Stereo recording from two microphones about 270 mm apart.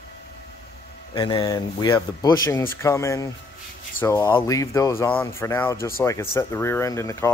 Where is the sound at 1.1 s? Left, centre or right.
Centre.